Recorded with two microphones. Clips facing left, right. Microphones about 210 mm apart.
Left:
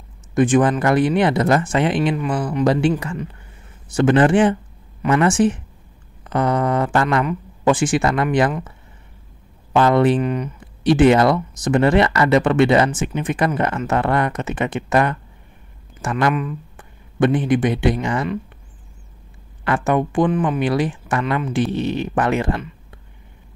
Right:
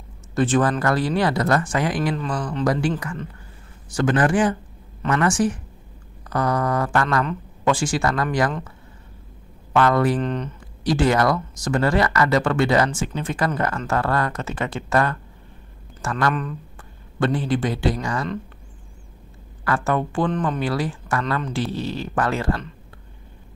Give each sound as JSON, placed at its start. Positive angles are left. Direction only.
{"t": 0.3, "sound": "speech", "side_deg": 15}
{"t": 2.1, "sound": "speech", "side_deg": 10}
{"t": 2.6, "sound": "speech", "side_deg": 25}
{"t": 3.9, "sound": "speech", "side_deg": 25}
{"t": 9.7, "sound": "speech", "side_deg": 20}
{"t": 10.2, "sound": "speech", "side_deg": 10}
{"t": 10.8, "sound": "speech", "side_deg": 25}
{"t": 19.6, "sound": "speech", "side_deg": 20}